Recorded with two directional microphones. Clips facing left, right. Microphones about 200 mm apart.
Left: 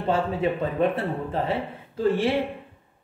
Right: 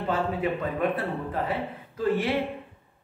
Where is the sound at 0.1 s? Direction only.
25° left (ahead or behind).